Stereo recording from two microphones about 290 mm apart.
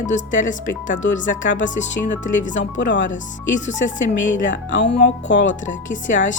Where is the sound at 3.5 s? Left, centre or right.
Left.